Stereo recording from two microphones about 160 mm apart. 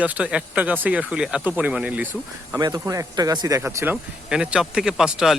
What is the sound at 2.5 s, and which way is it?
Speech, 20° right (ahead or behind).